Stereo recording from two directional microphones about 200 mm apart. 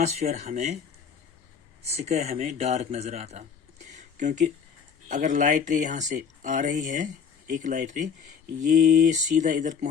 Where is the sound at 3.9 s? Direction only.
40° right (ahead or behind).